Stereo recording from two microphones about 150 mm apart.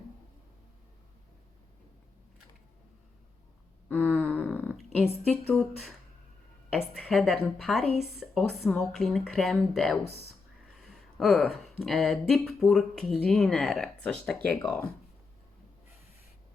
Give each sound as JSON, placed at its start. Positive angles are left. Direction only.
{"t": 3.8, "sound": "a sound", "side_deg": 10}
{"t": 5.3, "sound": "speech", "side_deg": 5}
{"t": 7.9, "sound": "speech", "side_deg": 45}
{"t": 8.2, "sound": "speech", "side_deg": 0}